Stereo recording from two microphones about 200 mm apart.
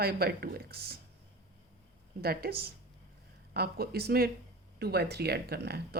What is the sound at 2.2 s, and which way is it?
Speech, 50° right (ahead or behind).